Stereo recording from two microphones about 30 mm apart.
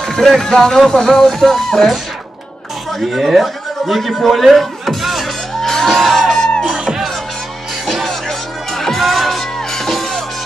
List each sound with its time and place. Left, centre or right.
0.0 s a sound: centre
0.4 s speech: centre
2.9 s a man's voice: centre
4.3 s music: centre
5.6 s music: centre
7.8 s music: centre